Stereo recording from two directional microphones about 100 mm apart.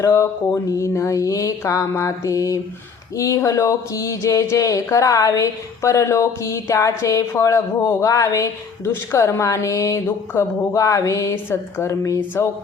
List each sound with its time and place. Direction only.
0.0 s speech: 30° left (ahead or behind)